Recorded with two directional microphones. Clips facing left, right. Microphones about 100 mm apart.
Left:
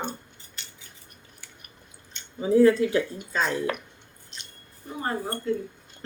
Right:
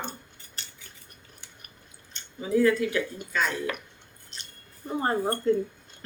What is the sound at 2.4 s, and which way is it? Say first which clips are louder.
Speech: left 4 dB; 30° left (ahead or behind).